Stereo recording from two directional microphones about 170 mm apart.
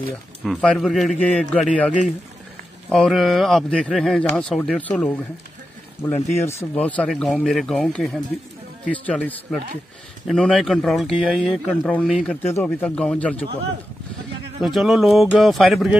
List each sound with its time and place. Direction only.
0.4 s speech: centre (ahead or behind)
2.9 s speech: centre (ahead or behind)
6.0 s speech: 25° left (ahead or behind)
6.3 s a man's voice: 15° left (ahead or behind)
14.6 s speech: centre (ahead or behind)